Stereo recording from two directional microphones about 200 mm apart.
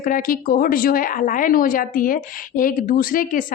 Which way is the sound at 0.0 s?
45° left (ahead or behind).